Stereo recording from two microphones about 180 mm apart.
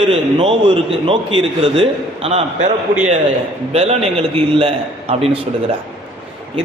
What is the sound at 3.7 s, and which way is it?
A man's voice, 35° right (ahead or behind).